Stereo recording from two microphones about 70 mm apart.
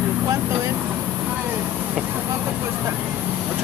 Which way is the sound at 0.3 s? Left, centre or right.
Right.